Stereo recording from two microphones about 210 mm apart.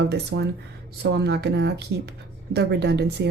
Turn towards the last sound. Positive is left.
turn(degrees=-55)  # may be behind; listen again after turning